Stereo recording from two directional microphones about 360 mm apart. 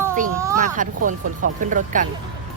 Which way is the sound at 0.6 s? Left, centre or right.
Right.